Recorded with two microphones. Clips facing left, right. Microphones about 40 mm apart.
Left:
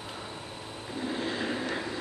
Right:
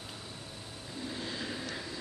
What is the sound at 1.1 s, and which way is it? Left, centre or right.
Vehicle, left.